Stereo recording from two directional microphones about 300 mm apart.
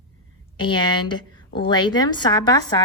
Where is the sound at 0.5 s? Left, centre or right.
Centre.